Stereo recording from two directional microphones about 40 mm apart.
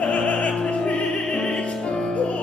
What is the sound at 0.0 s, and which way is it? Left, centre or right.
Opera, left.